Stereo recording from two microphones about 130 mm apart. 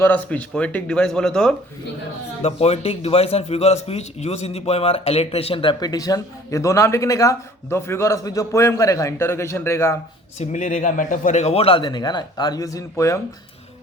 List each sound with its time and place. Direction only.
0.0 s speech: 10° left (ahead or behind)
2.4 s a man's voice: 55° left (ahead or behind); by 10.0 s 20° left (ahead or behind)
10.3 s a man's voice: 70° left (ahead or behind); by 13.1 s 25° left (ahead or behind)